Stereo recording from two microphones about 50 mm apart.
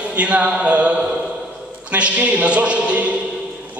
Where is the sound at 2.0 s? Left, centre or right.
Right.